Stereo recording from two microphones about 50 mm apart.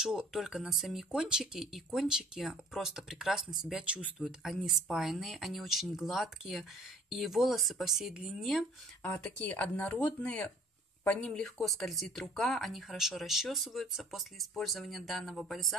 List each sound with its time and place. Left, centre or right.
0.0 s speech: centre
9.4 s speech: left
11.6 s speech: centre